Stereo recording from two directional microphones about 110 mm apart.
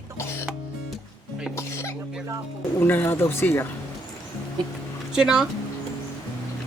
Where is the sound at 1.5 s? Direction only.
25° left (ahead or behind).